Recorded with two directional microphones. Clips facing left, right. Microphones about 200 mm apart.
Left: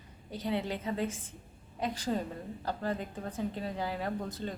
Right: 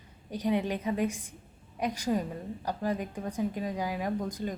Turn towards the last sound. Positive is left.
turn(degrees=-15)  # may be behind; listen again after turning